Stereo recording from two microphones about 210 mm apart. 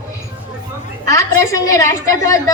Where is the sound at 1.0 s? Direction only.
15° left (ahead or behind).